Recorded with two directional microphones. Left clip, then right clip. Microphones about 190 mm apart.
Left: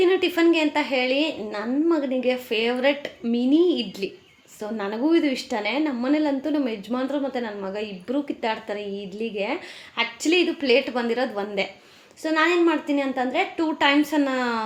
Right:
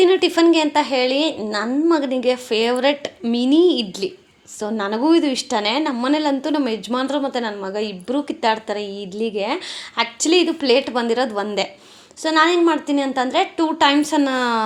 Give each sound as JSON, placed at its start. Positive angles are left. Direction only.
{"t": 0.0, "sound": "speech", "side_deg": -30}